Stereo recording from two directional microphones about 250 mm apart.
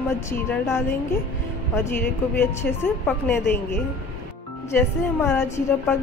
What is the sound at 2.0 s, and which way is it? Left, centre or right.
A woman's voice, centre.